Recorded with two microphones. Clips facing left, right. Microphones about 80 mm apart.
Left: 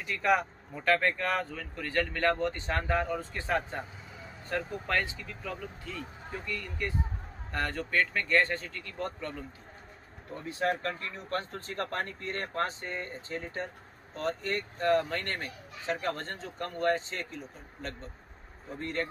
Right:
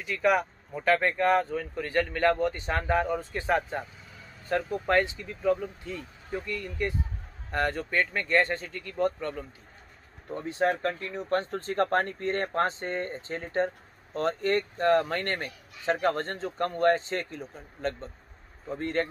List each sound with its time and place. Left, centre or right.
0.1 s speech: centre
1.1 s speech: right
4.8 s speech: right
10.3 s speech: right
11.5 s speech: right